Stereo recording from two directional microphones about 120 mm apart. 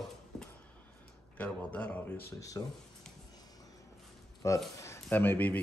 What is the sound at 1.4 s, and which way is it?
Speech, 10° left (ahead or behind).